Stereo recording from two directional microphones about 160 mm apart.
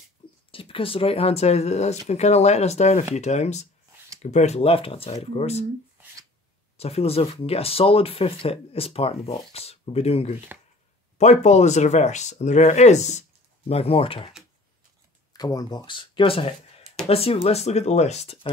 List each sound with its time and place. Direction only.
0.5 s speech: 35° left (ahead or behind)
6.8 s speech: 40° left (ahead or behind)
15.3 s speech: 25° left (ahead or behind)